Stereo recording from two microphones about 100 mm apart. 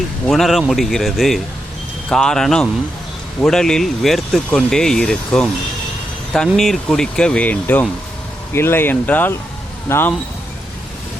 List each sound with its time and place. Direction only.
0.3 s speech: centre (ahead or behind)
6.6 s speech: 5° left (ahead or behind); by 10.2 s 20° left (ahead or behind)